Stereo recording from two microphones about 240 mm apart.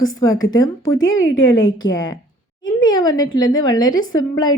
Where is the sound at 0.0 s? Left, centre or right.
Centre.